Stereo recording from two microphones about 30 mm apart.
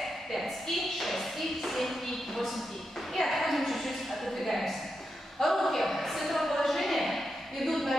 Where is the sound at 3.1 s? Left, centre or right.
Centre.